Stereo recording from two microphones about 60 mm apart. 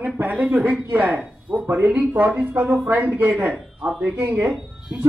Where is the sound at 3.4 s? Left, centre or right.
Centre.